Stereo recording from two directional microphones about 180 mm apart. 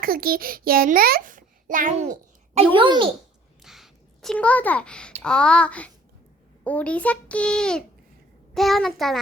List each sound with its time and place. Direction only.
0.0 s a child's voice: 55° right (ahead or behind)
2.7 s a child's voice: 25° right (ahead or behind)
3.6 s a child's voice: centre (ahead or behind)